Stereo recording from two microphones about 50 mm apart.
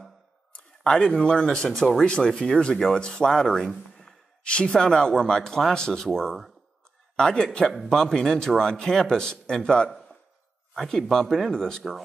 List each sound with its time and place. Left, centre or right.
0.5 s a sound: centre
1.2 s speech: left
1.7 s speech: centre
2.0 s a man's voice: centre
9.8 s a sound: centre
10.7 s a man's voice: centre